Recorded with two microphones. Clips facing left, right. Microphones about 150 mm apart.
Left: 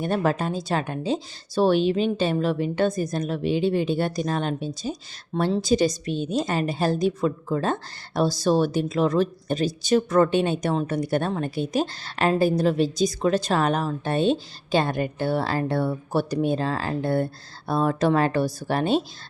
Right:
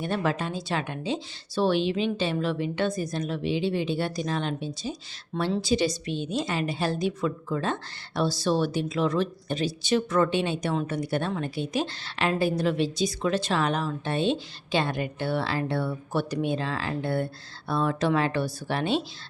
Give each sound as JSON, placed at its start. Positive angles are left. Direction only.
{"t": 0.0, "sound": "speech", "side_deg": 45}